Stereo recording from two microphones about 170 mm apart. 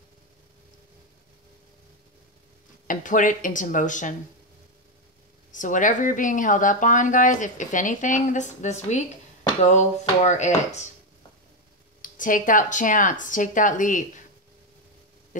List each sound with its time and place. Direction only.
2.9 s speech: 50° left (ahead or behind)
5.5 s speech: 50° left (ahead or behind)
12.0 s speech: 50° left (ahead or behind)